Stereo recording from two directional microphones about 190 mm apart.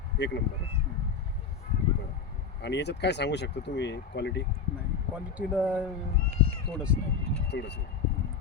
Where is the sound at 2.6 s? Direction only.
65° left (ahead or behind).